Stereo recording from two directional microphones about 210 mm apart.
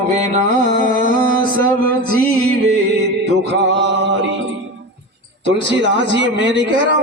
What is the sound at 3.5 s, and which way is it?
Music, 55° right (ahead or behind).